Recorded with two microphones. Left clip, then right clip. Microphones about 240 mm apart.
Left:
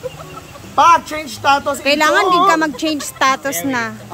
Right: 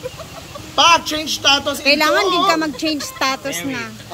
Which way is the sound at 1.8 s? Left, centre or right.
Centre.